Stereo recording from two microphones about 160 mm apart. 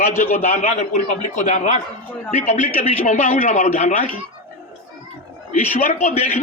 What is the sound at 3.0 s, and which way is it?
Speech, 45° left (ahead or behind).